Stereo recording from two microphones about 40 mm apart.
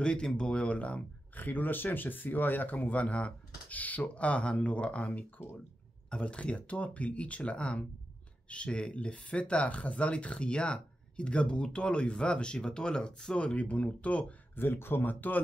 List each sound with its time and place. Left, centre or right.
0.0 s speech: left
1.3 s speech: left
13.6 s speech: left
14.5 s speech: left